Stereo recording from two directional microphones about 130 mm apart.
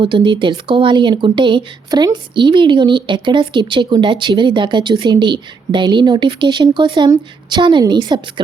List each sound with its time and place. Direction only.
0.0 s speech: 40° right (ahead or behind)